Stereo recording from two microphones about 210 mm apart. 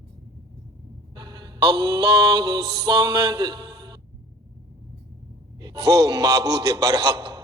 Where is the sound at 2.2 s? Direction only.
20° right (ahead or behind).